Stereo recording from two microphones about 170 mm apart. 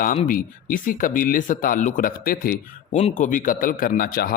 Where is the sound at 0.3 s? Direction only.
55° left (ahead or behind).